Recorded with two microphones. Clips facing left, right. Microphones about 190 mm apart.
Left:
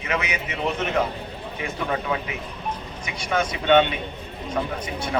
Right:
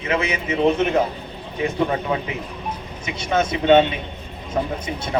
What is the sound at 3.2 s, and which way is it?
Speech, 25° right (ahead or behind).